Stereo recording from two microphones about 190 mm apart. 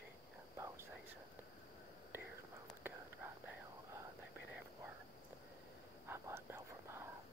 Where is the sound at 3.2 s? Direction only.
10° right (ahead or behind).